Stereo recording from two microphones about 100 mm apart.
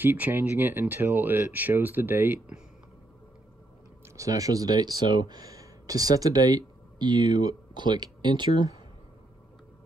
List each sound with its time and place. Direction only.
0.0 s speech: 20° right (ahead or behind)
4.2 s speech: 35° right (ahead or behind)